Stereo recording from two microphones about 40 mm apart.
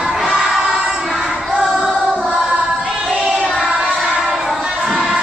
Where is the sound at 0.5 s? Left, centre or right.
Centre.